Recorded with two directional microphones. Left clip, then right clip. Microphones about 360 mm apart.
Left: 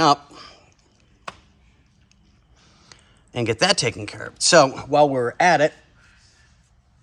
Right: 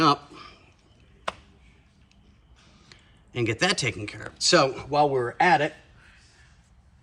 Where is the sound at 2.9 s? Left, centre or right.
Centre.